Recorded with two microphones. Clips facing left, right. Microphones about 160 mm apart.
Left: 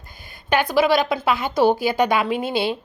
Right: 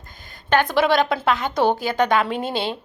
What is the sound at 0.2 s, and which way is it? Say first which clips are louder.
A woman's voice: right 1 dB; 10° left (ahead or behind).